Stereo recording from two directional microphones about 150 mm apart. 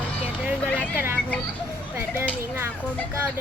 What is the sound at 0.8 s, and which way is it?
Vehicle, 15° right (ahead or behind).